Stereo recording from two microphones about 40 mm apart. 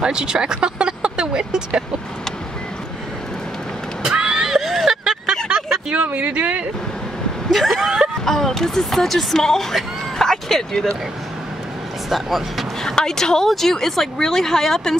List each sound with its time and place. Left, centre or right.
0.0 s speech: right
4.0 s neigh: centre
4.5 s a sound: centre
5.5 s vehicle: centre
5.9 s speech: right
7.7 s speech: centre
8.3 s speech: centre
10.1 s vehicle: centre
12.1 s speech: centre
12.8 s speech: centre